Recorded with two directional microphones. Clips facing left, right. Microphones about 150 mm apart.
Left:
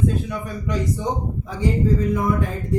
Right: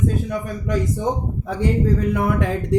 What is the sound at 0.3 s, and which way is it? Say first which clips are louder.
Speech: right 3 dB; 50° right (ahead or behind).